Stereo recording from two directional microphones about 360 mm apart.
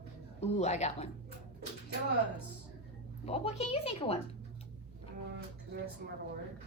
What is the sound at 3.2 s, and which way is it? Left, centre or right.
Speech, centre.